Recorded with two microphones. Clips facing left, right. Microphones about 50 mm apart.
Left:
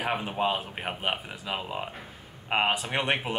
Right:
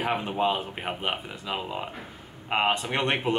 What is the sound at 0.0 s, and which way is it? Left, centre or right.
Speech, centre.